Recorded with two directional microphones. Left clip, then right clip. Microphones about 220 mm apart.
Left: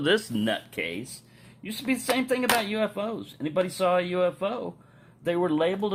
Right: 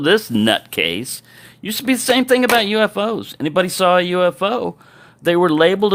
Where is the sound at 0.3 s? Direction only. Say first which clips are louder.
Right 12 dB; 40° right (ahead or behind).